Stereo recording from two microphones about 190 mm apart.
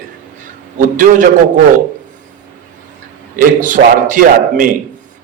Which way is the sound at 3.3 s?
45° right (ahead or behind).